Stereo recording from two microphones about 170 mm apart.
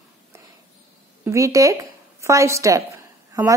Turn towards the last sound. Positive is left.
turn(degrees=-20)  # may be behind; listen again after turning